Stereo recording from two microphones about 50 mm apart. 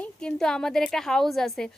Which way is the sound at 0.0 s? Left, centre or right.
Centre.